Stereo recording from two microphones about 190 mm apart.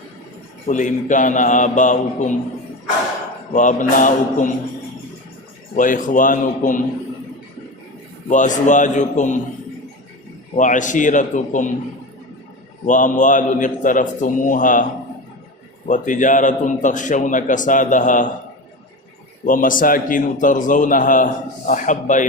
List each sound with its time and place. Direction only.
0.7 s a man's voice: 40° left (ahead or behind)
3.5 s a man's voice: 40° left (ahead or behind)
5.7 s a man's voice: 45° left (ahead or behind)
8.3 s a man's voice: 40° left (ahead or behind)
10.5 s a man's voice: 40° left (ahead or behind)
12.8 s a man's voice: 40° left (ahead or behind)
15.9 s a man's voice: 40° left (ahead or behind)
19.5 s a man's voice: 45° left (ahead or behind)